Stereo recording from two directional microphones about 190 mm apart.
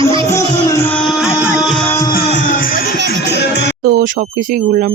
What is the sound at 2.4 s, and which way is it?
Music, 45° left (ahead or behind).